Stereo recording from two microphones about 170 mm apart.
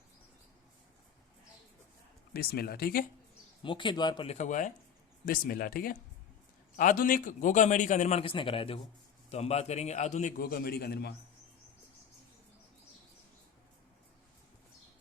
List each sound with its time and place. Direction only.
2.3 s speech: 65° left (ahead or behind)
3.6 s speech: 30° left (ahead or behind)
4.3 s a man's voice: 45° left (ahead or behind)
5.2 s a man's voice: 60° left (ahead or behind)